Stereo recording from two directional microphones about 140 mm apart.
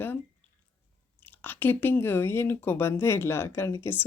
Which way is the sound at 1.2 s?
15° left (ahead or behind).